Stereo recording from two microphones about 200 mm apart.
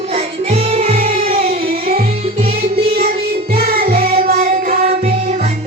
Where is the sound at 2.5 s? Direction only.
50° right (ahead or behind).